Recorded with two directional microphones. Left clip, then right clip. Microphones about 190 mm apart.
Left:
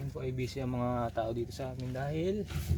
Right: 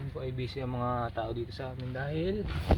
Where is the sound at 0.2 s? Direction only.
35° left (ahead or behind); by 2.3 s 15° left (ahead or behind).